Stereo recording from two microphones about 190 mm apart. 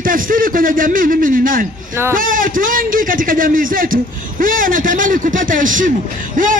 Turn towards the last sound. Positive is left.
turn(degrees=-45)  # may be behind; listen again after turning